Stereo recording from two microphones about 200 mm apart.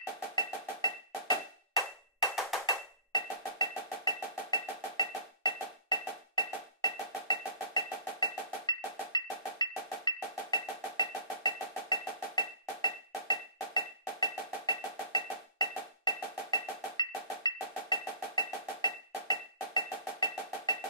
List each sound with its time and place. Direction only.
0.4 s music: 20° left (ahead or behind)
3.1 s music: 20° left (ahead or behind)